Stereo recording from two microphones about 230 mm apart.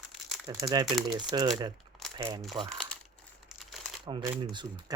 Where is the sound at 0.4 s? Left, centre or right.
Centre.